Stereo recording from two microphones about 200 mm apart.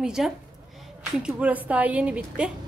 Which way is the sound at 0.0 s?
5° right (ahead or behind).